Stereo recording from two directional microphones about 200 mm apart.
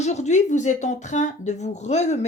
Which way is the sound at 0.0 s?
35° left (ahead or behind).